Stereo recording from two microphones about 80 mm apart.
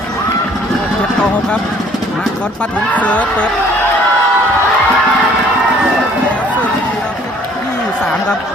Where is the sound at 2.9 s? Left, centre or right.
Centre.